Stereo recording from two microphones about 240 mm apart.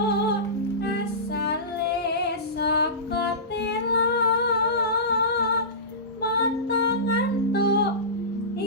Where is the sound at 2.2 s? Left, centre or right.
Left.